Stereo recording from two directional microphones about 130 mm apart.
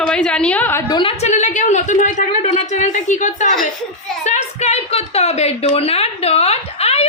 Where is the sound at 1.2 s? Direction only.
70° left (ahead or behind).